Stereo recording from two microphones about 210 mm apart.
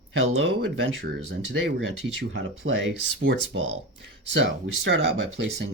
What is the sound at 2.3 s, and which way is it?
Speech, 65° right (ahead or behind).